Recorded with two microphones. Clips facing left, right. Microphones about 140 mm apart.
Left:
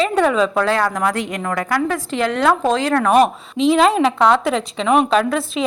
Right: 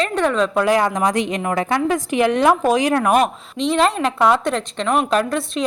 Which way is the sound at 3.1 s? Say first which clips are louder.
Left 3 dB; centre (ahead or behind).